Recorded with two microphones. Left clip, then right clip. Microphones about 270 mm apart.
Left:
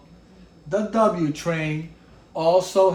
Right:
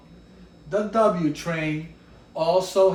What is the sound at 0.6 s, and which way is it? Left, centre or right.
Speech, left.